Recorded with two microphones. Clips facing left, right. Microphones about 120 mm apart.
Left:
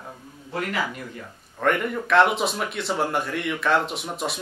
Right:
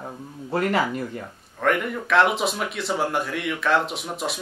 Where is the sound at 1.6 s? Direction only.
Centre (ahead or behind).